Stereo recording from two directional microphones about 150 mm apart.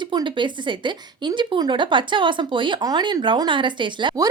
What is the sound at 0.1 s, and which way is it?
Speech, 30° right (ahead or behind).